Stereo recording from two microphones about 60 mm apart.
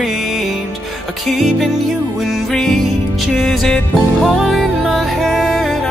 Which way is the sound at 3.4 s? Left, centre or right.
Centre.